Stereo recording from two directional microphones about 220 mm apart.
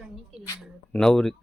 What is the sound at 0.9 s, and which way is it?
Speech, centre (ahead or behind).